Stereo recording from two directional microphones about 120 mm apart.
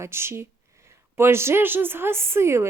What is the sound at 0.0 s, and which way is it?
A woman's voice, 20° right (ahead or behind).